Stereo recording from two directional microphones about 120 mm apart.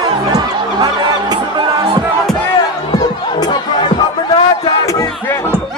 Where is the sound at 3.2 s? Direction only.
40° left (ahead or behind).